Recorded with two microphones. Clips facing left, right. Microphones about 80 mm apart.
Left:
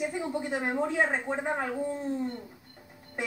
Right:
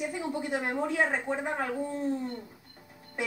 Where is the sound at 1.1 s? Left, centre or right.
Left.